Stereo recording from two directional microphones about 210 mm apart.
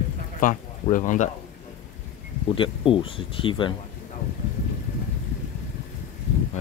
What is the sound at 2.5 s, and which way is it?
Speech, 25° left (ahead or behind).